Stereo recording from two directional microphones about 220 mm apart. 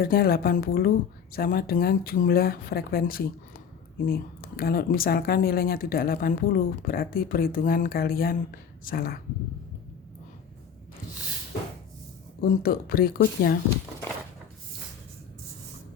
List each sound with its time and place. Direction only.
0.0 s speech: 45° left (ahead or behind)
12.4 s speech: 40° left (ahead or behind)